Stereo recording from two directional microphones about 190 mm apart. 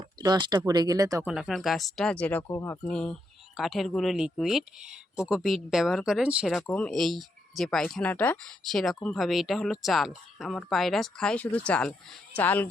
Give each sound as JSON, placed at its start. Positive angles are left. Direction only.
{"t": 0.2, "sound": "speech", "side_deg": -20}
{"t": 1.2, "sound": "speech", "side_deg": 0}